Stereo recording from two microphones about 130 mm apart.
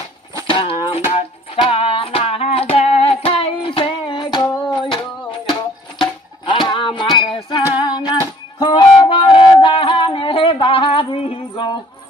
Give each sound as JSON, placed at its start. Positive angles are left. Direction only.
{"t": 0.4, "sound": "a sound", "side_deg": 40}
{"t": 0.9, "sound": "music", "side_deg": 45}
{"t": 6.0, "sound": "music", "side_deg": 40}